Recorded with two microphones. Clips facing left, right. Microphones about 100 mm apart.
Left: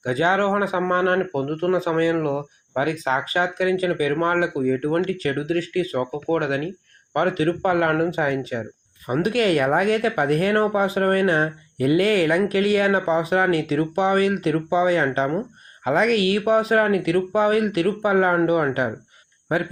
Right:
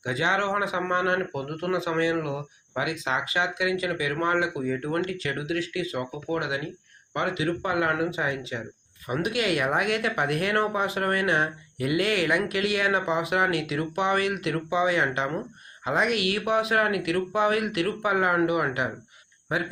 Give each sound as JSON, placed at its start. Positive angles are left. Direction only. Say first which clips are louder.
{"t": 0.0, "sound": "speech", "louder": "left 6 dB", "side_deg": 40}